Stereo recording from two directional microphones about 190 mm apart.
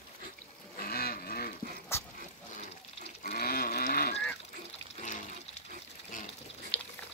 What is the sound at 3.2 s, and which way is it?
Livestock, 50° left (ahead or behind).